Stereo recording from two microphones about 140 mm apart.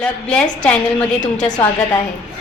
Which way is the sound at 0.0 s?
5° left (ahead or behind).